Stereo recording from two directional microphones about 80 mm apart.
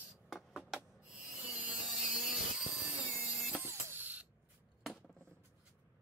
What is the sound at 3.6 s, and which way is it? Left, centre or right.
Printer, right.